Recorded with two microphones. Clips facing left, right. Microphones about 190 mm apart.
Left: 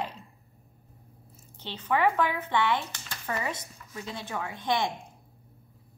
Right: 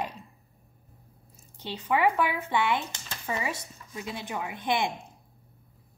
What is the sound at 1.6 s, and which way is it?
A woman's voice, 10° right (ahead or behind).